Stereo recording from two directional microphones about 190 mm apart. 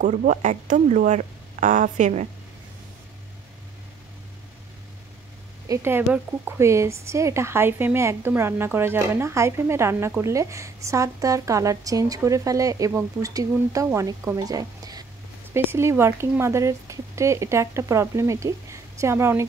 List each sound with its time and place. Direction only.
0.0 s speech: 40° right (ahead or behind)
5.7 s speech: 15° right (ahead or behind)